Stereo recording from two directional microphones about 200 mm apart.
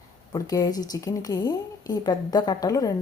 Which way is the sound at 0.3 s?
20° left (ahead or behind).